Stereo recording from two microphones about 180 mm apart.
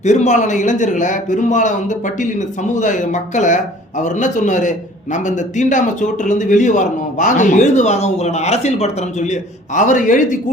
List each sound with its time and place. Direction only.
0.0 s a man's voice: 40° left (ahead or behind)